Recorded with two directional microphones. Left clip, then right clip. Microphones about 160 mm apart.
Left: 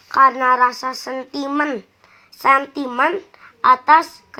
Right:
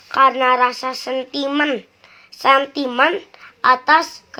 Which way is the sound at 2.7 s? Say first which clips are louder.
Right 2 dB; 10° left (ahead or behind).